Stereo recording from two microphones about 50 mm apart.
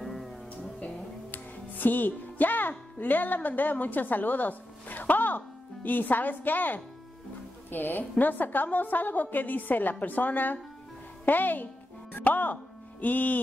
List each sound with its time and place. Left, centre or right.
0.0 s music: centre
1.3 s music: left
3.0 s a woman's voice: left